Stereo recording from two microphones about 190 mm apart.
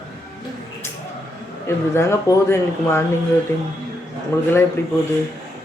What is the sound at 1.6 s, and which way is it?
Speech, 15° left (ahead or behind).